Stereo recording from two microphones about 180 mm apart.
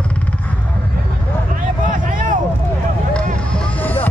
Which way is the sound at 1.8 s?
45° right (ahead or behind).